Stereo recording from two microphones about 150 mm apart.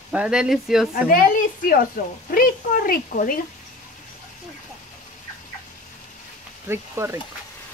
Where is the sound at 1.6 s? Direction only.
65° left (ahead or behind).